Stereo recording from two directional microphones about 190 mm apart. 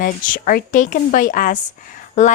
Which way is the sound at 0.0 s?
45° left (ahead or behind).